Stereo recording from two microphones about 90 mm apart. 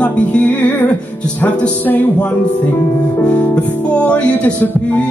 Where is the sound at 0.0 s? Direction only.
15° left (ahead or behind).